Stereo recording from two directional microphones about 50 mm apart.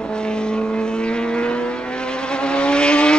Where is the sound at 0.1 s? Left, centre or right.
Centre.